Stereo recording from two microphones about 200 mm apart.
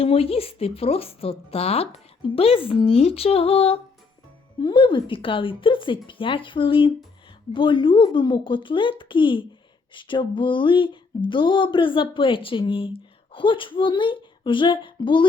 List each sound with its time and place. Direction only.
0.0 s music: 30° left (ahead or behind)